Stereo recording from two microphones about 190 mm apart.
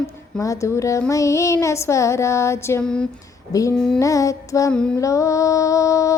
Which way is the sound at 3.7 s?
5° left (ahead or behind).